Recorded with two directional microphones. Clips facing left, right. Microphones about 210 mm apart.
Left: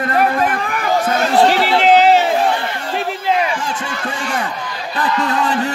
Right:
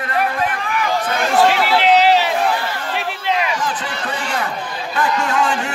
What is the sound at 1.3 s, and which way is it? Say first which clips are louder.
Chatter: left 1 dB; 30° left (ahead or behind).